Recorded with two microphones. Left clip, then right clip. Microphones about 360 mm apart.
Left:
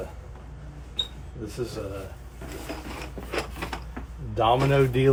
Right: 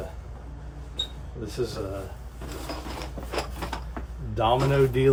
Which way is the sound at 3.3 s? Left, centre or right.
Centre.